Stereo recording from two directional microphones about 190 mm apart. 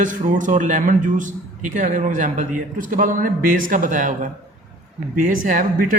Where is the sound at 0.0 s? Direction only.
40° right (ahead or behind).